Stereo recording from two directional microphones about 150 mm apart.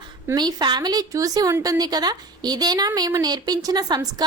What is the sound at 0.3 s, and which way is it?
A woman's voice, 30° right (ahead or behind).